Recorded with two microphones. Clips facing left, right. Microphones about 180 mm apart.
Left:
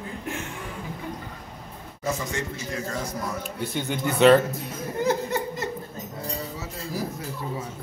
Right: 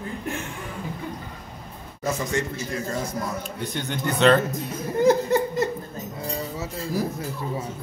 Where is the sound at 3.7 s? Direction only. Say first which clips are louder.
Left 2 dB; 5° left (ahead or behind).